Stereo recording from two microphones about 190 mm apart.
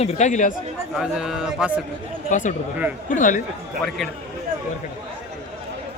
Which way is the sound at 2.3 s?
40° left (ahead or behind).